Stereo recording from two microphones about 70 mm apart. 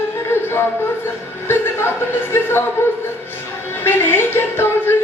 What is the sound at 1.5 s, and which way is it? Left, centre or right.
Chuckle, left.